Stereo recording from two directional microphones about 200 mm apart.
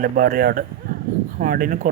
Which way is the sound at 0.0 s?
45° right (ahead or behind).